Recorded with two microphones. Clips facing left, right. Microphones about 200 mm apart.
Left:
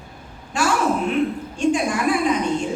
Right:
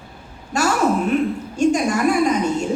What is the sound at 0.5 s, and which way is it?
Speech, 45° right (ahead or behind).